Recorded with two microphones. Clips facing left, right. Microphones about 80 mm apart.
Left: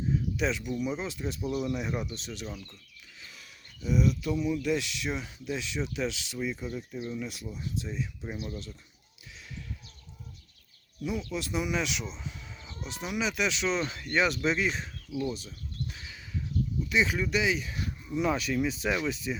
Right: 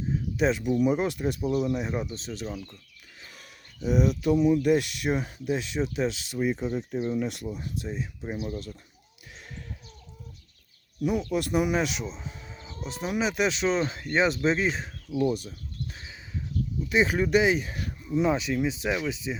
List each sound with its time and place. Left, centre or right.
0.3 s speech: right
0.9 s speech: right
1.6 s speech: right
3.2 s speech: right
7.1 s speech: right
7.5 s speech: right
11.0 s speech: right
12.1 s a sound: right
12.7 s speech: right
15.1 s a sound: right
16.9 s speech: right
18.1 s speech: right